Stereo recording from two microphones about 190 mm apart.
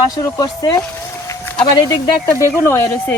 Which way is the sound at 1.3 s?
10° left (ahead or behind).